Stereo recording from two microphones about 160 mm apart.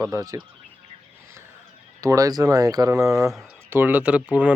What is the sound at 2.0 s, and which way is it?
Speech, 20° right (ahead or behind).